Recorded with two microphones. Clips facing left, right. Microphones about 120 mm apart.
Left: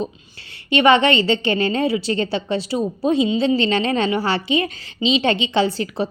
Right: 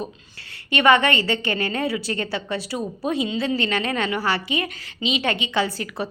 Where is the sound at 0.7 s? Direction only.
25° left (ahead or behind).